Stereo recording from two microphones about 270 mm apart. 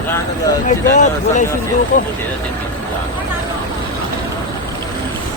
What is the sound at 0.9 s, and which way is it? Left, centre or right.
Speech, left.